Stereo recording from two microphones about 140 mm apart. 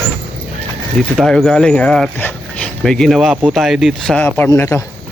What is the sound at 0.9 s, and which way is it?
Speech, centre (ahead or behind).